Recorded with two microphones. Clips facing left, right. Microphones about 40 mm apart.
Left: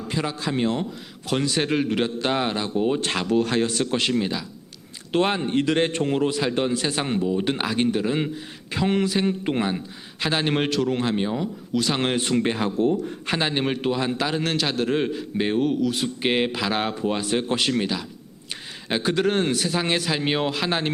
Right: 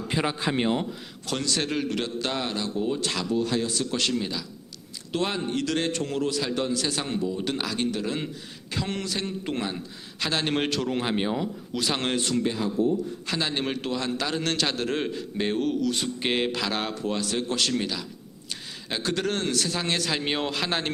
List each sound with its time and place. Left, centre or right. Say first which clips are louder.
0.1 s a man's voice: even; centre
1.3 s a man's voice: left 5 dB; centre; by 3.2 s left
3.2 s speech: left 5 dB; left
3.9 s a man's voice: left 3 dB; left; by 11.0 s centre
11.0 s speech: left 2 dB; centre
12.4 s speech: left 3 dB; left
13.2 s a man's voice: left 7 dB; left
13.5 s a man's voice: left 5 dB; centre